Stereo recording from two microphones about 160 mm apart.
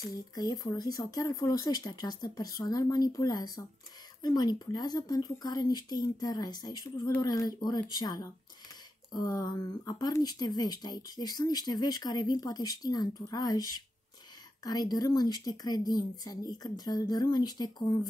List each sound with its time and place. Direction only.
0.0 s speech: 25° left (ahead or behind)